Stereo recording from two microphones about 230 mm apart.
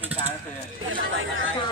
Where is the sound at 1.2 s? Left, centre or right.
Right.